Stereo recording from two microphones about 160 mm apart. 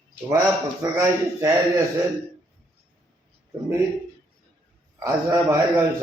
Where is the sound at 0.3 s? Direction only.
20° right (ahead or behind).